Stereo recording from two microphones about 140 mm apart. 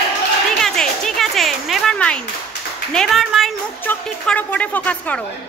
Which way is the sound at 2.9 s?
Centre (ahead or behind).